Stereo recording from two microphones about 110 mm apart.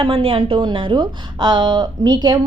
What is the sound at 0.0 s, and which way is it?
A woman's voice, 55° right (ahead or behind).